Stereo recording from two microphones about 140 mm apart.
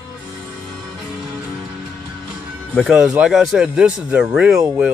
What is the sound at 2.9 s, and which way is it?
Speech, 5° right (ahead or behind).